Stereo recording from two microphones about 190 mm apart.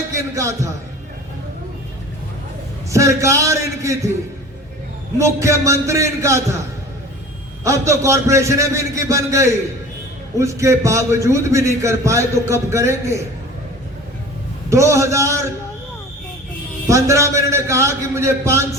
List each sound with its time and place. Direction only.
0.1 s a man's voice: 15° right (ahead or behind)
2.9 s a man's voice: 15° right (ahead or behind)
5.1 s a man's voice: 15° right (ahead or behind)
7.6 s a man's voice: 15° right (ahead or behind)
14.7 s a man's voice: 15° right (ahead or behind)
16.8 s a man's voice: 15° right (ahead or behind)